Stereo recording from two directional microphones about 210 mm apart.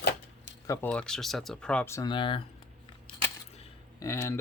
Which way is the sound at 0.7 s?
5° left (ahead or behind).